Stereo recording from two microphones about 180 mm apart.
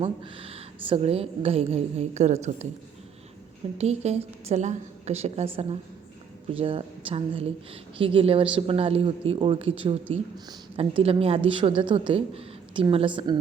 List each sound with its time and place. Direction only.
0.0 s speech: 30° right (ahead or behind)
3.8 s speech: 35° right (ahead or behind)
6.6 s a woman's voice: 30° right (ahead or behind)